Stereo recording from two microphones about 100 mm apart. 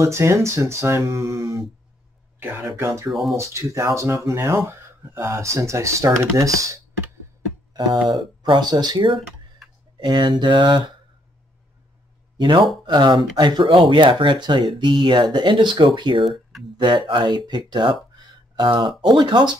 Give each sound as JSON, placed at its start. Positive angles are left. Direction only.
{"t": 0.0, "sound": "speech", "side_deg": -30}
{"t": 2.7, "sound": "speech", "side_deg": -25}
{"t": 3.1, "sound": "speech", "side_deg": 0}
{"t": 3.3, "sound": "speech", "side_deg": -30}
{"t": 7.7, "sound": "speech", "side_deg": -45}
{"t": 12.4, "sound": "speech", "side_deg": -50}